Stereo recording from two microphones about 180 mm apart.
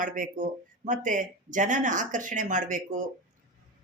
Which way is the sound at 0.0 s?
45° right (ahead or behind).